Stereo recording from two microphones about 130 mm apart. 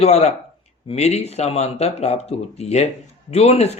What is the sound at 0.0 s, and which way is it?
Speech, 55° left (ahead or behind).